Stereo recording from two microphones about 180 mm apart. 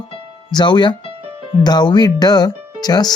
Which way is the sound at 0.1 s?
25° left (ahead or behind).